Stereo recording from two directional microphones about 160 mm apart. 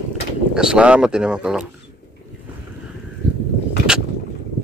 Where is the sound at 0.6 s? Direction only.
5° right (ahead or behind).